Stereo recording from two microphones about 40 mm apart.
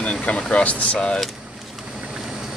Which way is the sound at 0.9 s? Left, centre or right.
Left.